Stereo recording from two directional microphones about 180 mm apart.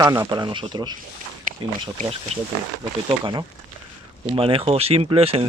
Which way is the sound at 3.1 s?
30° right (ahead or behind).